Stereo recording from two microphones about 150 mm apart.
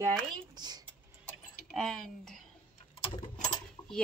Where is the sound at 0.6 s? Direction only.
25° right (ahead or behind).